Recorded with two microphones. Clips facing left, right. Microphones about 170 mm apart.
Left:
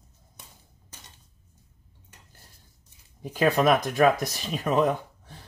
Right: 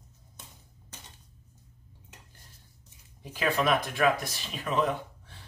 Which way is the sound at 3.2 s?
45° left (ahead or behind).